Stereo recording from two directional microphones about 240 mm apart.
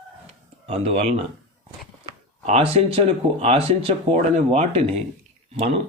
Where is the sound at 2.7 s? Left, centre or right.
Right.